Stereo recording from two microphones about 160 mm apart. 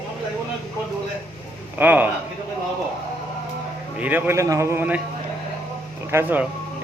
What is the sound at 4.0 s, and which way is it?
Speech, 10° right (ahead or behind).